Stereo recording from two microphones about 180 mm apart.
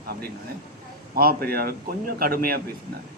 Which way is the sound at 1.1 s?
55° right (ahead or behind).